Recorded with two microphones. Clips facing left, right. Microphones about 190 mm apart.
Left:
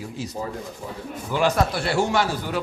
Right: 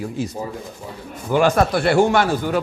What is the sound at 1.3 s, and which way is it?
A man's voice, 55° right (ahead or behind).